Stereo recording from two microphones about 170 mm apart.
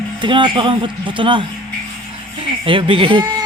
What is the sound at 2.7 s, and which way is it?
Speech, 30° right (ahead or behind).